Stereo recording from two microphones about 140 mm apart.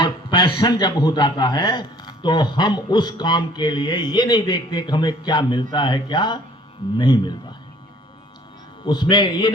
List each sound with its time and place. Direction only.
0.0 s a man's voice: 35° left (ahead or behind)
8.9 s a man's voice: 30° left (ahead or behind)